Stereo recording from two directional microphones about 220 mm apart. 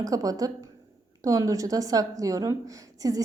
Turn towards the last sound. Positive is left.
turn(degrees=-15)  # may be behind; listen again after turning